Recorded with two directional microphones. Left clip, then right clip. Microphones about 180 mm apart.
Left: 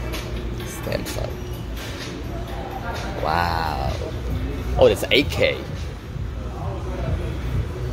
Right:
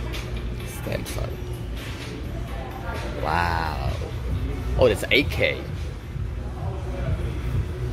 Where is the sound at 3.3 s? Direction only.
Centre (ahead or behind).